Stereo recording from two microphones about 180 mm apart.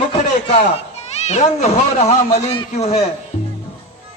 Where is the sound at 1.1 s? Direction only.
40° left (ahead or behind).